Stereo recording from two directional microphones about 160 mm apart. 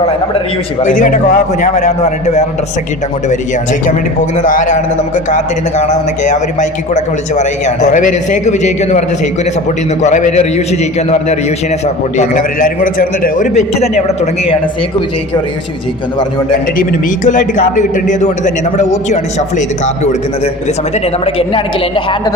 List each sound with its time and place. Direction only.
0.0 s a man's voice: 40° left (ahead or behind)
12.1 s a man's voice: 55° left (ahead or behind)
13.5 s a man's voice: 40° left (ahead or behind)
17.2 s a man's voice: 55° left (ahead or behind)
21.2 s a man's voice: 35° left (ahead or behind)